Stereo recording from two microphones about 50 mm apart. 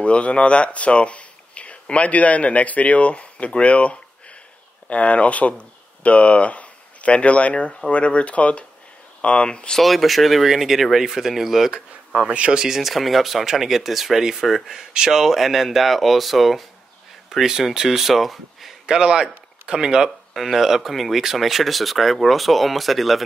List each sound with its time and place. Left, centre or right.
0.0 s speech: left
9.8 s speech: centre
12.1 s speech: right
12.6 s speech: centre
18.9 s speech: centre